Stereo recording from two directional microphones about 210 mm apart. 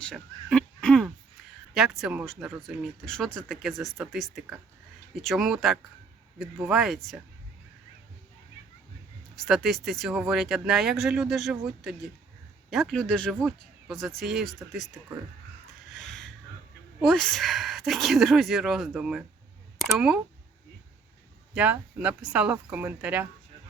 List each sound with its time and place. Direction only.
0.0 s speech: 5° left (ahead or behind)
9.3 s speech: centre (ahead or behind)
16.0 s a sound: centre (ahead or behind)
17.0 s speech: centre (ahead or behind)
21.5 s speech: 5° right (ahead or behind)